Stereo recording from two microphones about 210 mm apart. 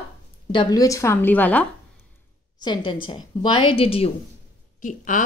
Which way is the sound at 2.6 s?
20° left (ahead or behind).